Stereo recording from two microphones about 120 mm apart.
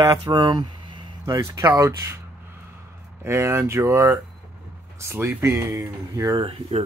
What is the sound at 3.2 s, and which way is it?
Speech, 20° right (ahead or behind).